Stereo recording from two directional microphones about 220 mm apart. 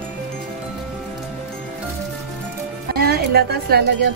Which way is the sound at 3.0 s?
45° right (ahead or behind).